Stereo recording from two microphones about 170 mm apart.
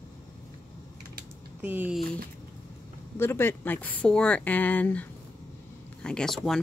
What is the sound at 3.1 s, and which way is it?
Speech, 15° left (ahead or behind).